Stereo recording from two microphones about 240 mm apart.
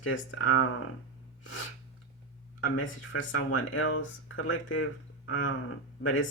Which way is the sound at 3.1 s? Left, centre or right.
Left.